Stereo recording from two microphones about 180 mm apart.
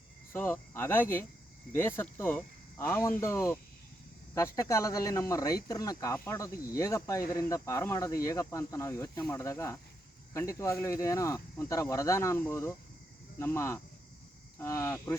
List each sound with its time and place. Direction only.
0.3 s speech: 10° left (ahead or behind)